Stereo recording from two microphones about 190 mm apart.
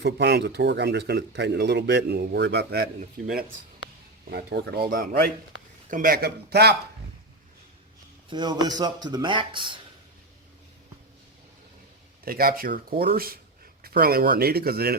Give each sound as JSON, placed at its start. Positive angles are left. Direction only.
{"t": 0.0, "sound": "speech", "side_deg": -65}
{"t": 4.3, "sound": "speech", "side_deg": -55}
{"t": 8.3, "sound": "speech", "side_deg": -20}
{"t": 12.2, "sound": "speech", "side_deg": -50}